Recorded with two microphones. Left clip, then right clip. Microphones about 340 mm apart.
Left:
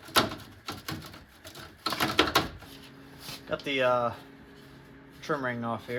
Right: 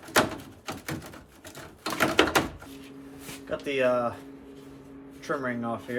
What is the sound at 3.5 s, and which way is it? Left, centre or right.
Speech, centre.